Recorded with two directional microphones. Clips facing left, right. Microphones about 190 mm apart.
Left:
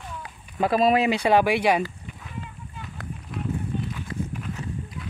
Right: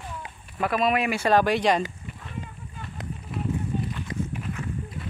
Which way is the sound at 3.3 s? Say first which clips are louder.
Right 1 dB; centre (ahead or behind).